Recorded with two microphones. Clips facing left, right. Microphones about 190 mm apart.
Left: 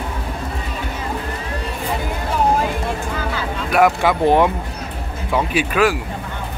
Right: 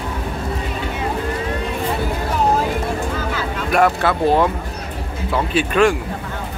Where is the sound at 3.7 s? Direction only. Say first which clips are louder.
Left 1 dB; 10° left (ahead or behind).